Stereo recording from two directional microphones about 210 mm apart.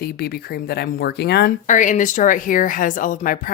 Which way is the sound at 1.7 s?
35° left (ahead or behind).